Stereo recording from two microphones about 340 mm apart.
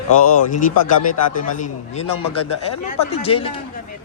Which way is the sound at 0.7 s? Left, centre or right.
Left.